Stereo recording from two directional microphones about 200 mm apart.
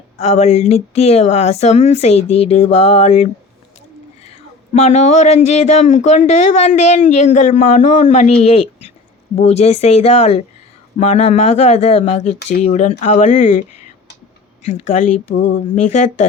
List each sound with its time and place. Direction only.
0.2 s speech: 35° left (ahead or behind)